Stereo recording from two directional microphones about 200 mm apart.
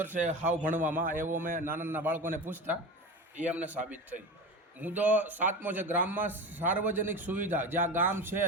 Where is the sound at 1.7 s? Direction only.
10° right (ahead or behind).